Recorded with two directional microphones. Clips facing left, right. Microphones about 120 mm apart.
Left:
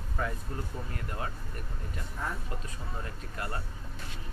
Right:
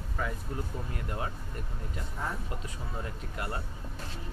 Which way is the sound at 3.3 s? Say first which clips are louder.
Right 1 dB; 20° right (ahead or behind).